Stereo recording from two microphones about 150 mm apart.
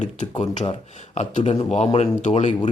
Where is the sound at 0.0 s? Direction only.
50° left (ahead or behind).